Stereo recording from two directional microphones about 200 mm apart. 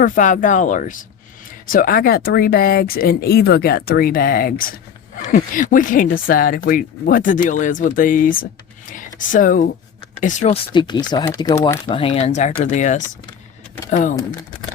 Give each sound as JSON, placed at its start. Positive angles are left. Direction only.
{"t": 0.0, "sound": "speech", "side_deg": 40}
{"t": 10.7, "sound": "speech", "side_deg": 25}